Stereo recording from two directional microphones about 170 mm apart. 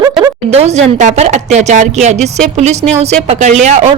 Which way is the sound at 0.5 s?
40° right (ahead or behind).